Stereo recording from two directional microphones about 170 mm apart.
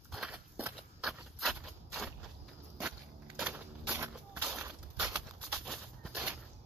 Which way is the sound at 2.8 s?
10° right (ahead or behind).